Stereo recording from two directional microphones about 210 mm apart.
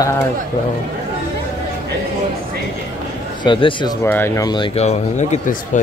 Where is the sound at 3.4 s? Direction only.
25° left (ahead or behind).